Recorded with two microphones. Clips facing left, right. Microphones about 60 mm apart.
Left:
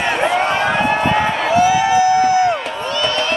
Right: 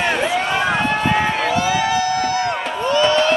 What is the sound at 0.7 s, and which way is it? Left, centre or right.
Run, centre.